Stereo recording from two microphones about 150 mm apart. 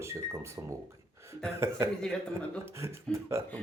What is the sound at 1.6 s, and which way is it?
Speech, 20° right (ahead or behind).